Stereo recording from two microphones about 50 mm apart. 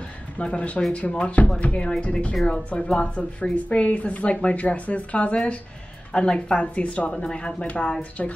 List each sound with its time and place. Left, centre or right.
0.4 s a woman's voice: left